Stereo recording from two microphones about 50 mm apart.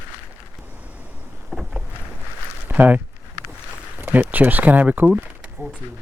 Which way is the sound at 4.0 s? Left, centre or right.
Right.